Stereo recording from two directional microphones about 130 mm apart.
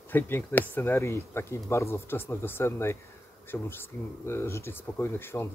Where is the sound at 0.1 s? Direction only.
15° left (ahead or behind).